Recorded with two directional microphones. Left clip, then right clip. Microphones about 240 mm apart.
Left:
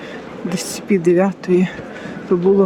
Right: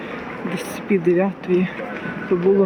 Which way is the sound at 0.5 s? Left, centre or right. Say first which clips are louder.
Left 3 dB; left.